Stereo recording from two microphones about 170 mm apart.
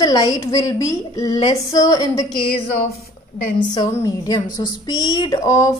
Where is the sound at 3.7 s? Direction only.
25° left (ahead or behind).